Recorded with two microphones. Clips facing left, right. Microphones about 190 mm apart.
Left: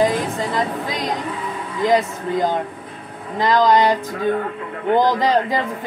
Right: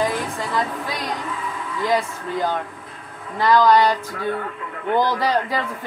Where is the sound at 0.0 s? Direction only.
20° left (ahead or behind).